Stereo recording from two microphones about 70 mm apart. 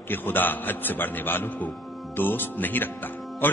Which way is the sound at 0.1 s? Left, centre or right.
Left.